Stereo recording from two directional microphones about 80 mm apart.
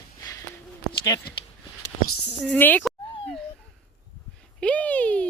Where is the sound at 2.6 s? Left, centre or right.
Left.